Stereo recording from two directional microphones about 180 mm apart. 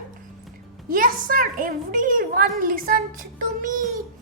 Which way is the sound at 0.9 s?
50° right (ahead or behind).